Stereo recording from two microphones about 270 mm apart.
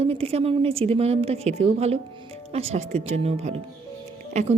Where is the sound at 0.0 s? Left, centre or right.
Right.